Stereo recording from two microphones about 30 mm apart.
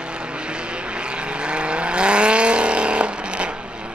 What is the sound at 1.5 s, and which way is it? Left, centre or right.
Vehicle, right.